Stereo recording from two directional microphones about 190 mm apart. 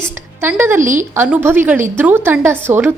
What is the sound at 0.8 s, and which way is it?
Speech, 40° right (ahead or behind).